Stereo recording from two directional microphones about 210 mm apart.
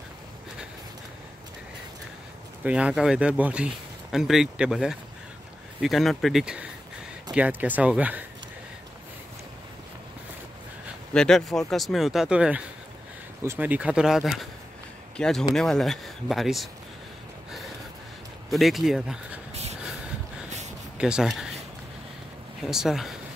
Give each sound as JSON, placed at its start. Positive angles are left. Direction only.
{"t": 2.6, "sound": "speech", "side_deg": -5}
{"t": 11.1, "sound": "speech", "side_deg": 0}
{"t": 18.5, "sound": "speech", "side_deg": 0}
{"t": 19.5, "sound": "a sound", "side_deg": -30}
{"t": 21.0, "sound": "speech", "side_deg": -5}
{"t": 22.7, "sound": "speech", "side_deg": 0}